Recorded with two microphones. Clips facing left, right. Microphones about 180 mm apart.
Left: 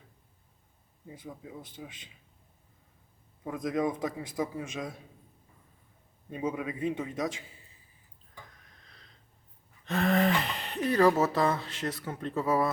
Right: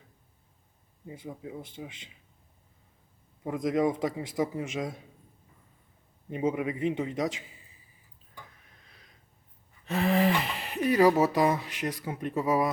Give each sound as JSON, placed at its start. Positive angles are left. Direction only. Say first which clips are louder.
{"t": 1.0, "sound": "a man's voice", "louder": "right 4 dB", "side_deg": -20}
{"t": 3.4, "sound": "a man's voice", "louder": "right 4 dB", "side_deg": -20}
{"t": 6.3, "sound": "a man's voice", "louder": "right 4 dB", "side_deg": -20}
{"t": 8.6, "sound": "tick-tock", "louder": "even", "side_deg": -10}
{"t": 9.8, "sound": "speech", "louder": "right 1 dB", "side_deg": -5}